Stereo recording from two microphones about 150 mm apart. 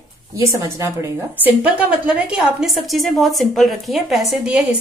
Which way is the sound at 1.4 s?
10° right (ahead or behind).